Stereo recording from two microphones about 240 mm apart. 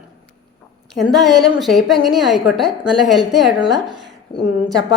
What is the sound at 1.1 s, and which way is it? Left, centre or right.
A woman's voice, centre.